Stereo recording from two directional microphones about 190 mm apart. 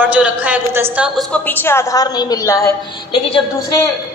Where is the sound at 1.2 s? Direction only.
10° left (ahead or behind); by 3.8 s 25° left (ahead or behind).